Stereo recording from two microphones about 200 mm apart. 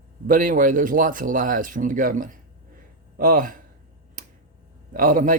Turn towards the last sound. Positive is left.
turn(degrees=-40)  # may be behind; listen again after turning